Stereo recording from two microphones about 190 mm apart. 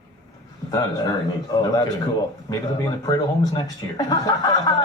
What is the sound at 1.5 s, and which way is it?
Speech, 20° left (ahead or behind).